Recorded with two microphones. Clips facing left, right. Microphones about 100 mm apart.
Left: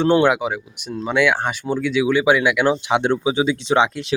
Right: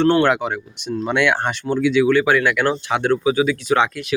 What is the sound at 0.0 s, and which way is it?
Speech, 15° left (ahead or behind).